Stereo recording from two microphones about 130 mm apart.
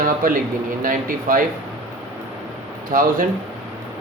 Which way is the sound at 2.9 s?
90° right.